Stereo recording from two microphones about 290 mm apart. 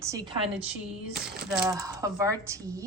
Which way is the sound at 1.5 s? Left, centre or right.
Centre.